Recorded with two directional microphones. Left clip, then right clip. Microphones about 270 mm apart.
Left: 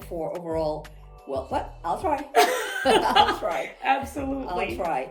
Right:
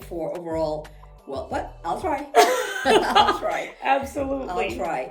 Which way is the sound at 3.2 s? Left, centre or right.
Centre.